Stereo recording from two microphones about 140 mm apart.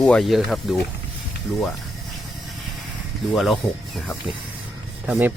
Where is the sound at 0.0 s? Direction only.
5° left (ahead or behind).